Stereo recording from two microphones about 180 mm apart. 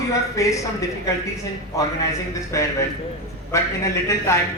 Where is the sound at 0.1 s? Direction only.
15° left (ahead or behind).